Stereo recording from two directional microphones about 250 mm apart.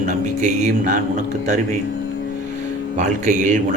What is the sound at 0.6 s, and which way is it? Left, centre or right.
Speech, right.